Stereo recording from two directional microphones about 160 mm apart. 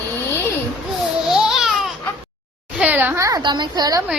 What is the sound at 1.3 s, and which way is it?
Baby cry, centre (ahead or behind).